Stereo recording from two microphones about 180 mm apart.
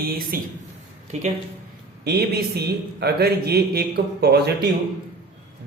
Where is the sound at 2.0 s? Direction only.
60° right (ahead or behind).